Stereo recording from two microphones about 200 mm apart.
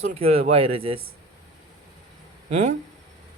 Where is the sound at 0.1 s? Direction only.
30° right (ahead or behind).